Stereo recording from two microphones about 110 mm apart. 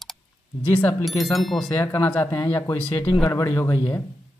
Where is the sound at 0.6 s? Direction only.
15° left (ahead or behind).